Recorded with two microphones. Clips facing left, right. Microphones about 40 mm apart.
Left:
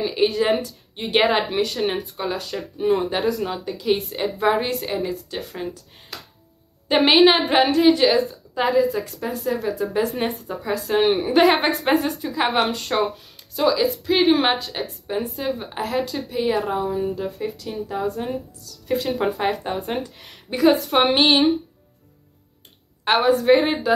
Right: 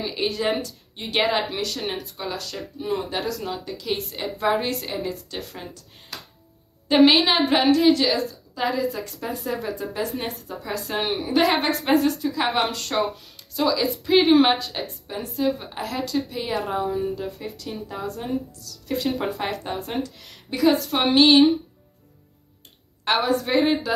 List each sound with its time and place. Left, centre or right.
0.0 s speech: centre
8.6 s a woman's voice: centre
10.1 s speech: left
10.6 s speech: centre
11.1 s speech: left
11.3 s a woman's voice: centre
19.9 s speech: centre
23.1 s speech: centre